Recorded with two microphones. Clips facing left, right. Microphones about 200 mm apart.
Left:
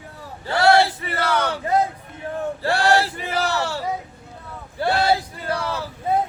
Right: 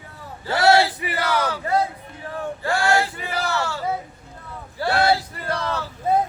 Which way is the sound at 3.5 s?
35° left (ahead or behind).